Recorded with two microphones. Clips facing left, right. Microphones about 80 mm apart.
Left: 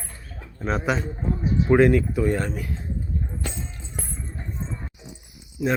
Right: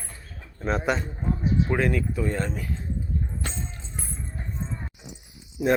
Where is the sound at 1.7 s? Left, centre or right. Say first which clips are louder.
Left 8 dB; centre.